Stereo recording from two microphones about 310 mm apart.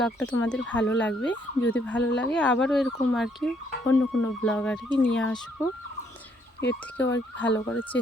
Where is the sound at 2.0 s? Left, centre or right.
Left.